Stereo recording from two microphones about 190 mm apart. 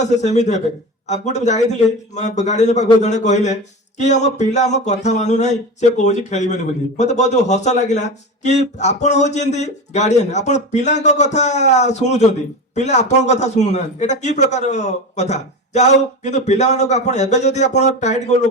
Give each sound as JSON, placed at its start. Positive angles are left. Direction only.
{"t": 0.0, "sound": "speech", "side_deg": 40}